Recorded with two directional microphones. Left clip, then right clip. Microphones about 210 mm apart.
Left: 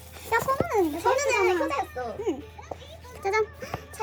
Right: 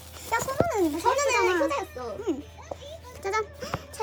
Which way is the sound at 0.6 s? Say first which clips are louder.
Even; 15° right (ahead or behind).